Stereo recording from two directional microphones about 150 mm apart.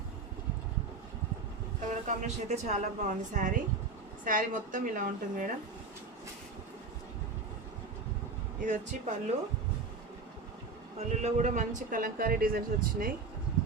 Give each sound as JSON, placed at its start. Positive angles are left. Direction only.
{"t": 1.9, "sound": "a woman's voice", "side_deg": -50}
{"t": 8.6, "sound": "a woman's voice", "side_deg": -55}
{"t": 10.9, "sound": "speech", "side_deg": -45}